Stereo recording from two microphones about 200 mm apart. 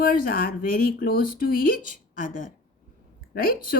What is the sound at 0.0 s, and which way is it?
Speech, 45° left (ahead or behind).